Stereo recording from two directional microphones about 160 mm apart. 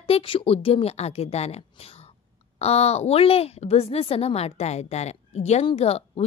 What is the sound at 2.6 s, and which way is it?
A woman's voice, 40° left (ahead or behind).